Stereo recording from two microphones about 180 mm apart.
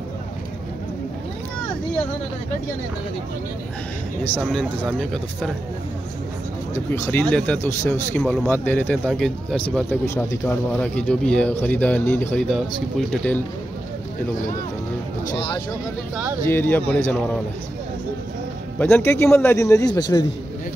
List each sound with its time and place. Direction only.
4.4 s speech: centre (ahead or behind)
6.9 s speech: 10° left (ahead or behind)
10.0 s speech: 15° left (ahead or behind)
16.4 s speech: 10° left (ahead or behind)
18.8 s speech: 10° left (ahead or behind)